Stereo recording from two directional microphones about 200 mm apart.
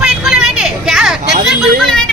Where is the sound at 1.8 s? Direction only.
5° left (ahead or behind).